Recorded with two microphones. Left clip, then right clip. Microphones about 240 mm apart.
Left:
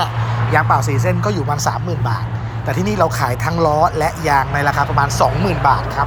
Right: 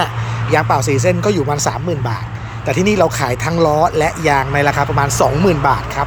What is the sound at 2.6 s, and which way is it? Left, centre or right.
Speech, right.